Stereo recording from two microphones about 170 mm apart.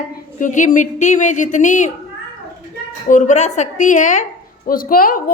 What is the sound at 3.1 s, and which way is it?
A woman's voice, 45° left (ahead or behind).